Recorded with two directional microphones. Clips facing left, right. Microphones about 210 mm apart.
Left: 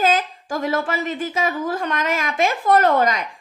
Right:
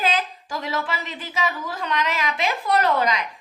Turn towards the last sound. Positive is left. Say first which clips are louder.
# left 4 dB
turn(degrees=45)  # may be behind; listen again after turning